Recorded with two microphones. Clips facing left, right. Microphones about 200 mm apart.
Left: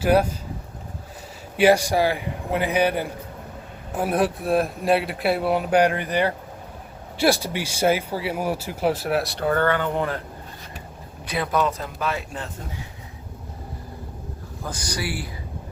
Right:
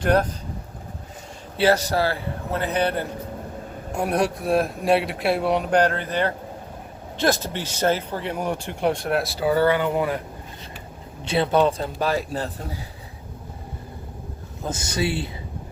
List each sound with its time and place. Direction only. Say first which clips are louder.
0.0 s a man's voice: left 1 dB; 10° left (ahead or behind)
1.5 s a man's voice: left 2 dB; 15° left (ahead or behind); by 10.2 s 10° right (ahead or behind)
11.3 s a man's voice: right 4 dB; 30° right (ahead or behind)
14.6 s speech: right 5 dB; 25° right (ahead or behind)